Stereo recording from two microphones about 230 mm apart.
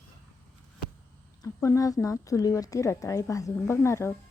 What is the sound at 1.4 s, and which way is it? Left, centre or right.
A woman's voice, centre.